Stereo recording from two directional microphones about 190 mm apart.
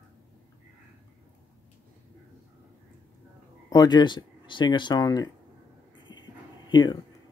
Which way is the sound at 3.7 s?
20° left (ahead or behind).